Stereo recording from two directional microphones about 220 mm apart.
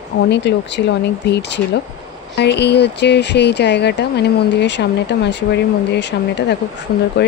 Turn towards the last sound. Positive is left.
turn(degrees=50)  # may be behind; listen again after turning